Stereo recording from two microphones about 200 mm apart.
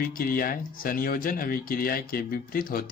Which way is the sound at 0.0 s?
45° left (ahead or behind).